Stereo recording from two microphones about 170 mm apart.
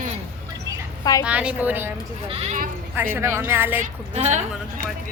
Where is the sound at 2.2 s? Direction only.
35° right (ahead or behind).